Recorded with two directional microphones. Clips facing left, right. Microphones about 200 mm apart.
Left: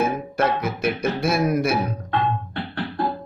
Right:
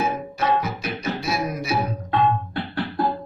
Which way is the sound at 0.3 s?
55° left (ahead or behind).